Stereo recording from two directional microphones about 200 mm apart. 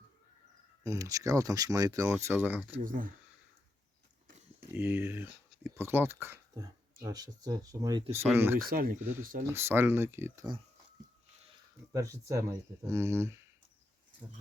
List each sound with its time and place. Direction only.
0.9 s speech: 15° right (ahead or behind)
2.8 s speech: 45° right (ahead or behind)
4.7 s speech: 10° right (ahead or behind)
8.5 s speech: 45° right (ahead or behind)
9.5 s speech: 10° right (ahead or behind)
11.9 s speech: 15° right (ahead or behind)